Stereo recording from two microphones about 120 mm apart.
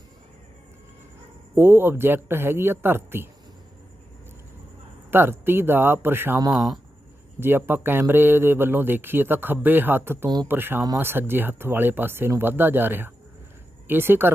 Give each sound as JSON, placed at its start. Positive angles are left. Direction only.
{"t": 1.5, "sound": "speech", "side_deg": -20}
{"t": 5.1, "sound": "speech", "side_deg": -20}
{"t": 10.2, "sound": "speech", "side_deg": -35}
{"t": 10.5, "sound": "speech", "side_deg": -15}